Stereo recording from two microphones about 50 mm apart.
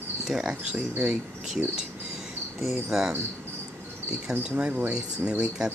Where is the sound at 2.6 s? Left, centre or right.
Centre.